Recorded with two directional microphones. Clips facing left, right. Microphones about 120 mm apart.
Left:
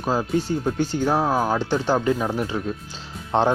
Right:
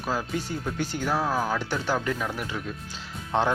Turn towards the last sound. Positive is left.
turn(degrees=30)  # may be behind; listen again after turning